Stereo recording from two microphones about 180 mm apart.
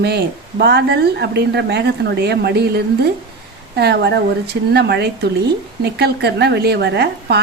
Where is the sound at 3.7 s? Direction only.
65° right (ahead or behind).